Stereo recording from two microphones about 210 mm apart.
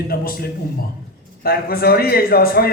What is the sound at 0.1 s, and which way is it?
Speech, 45° left (ahead or behind).